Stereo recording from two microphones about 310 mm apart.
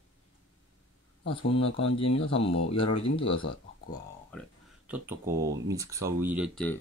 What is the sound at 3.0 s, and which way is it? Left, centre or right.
Speech, centre.